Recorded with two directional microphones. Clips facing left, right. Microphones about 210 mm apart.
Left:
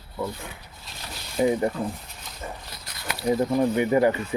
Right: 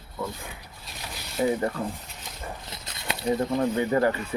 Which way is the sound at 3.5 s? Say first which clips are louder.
Left 4 dB; 15° left (ahead or behind).